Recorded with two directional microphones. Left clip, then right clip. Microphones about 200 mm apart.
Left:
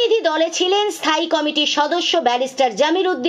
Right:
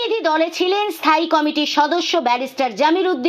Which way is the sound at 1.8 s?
15° right (ahead or behind).